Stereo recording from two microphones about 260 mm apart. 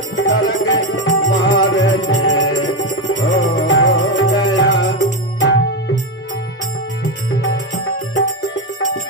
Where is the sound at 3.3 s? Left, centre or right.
Left.